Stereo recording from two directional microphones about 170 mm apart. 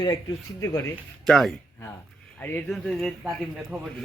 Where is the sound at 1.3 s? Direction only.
Centre (ahead or behind).